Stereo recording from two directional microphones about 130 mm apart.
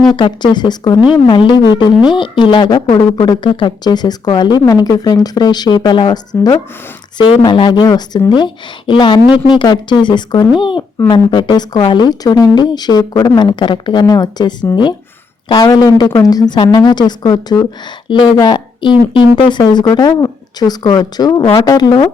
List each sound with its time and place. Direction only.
0.2 s speech: 35° left (ahead or behind)
15.4 s speech: 45° left (ahead or behind)
15.7 s speech: 30° left (ahead or behind)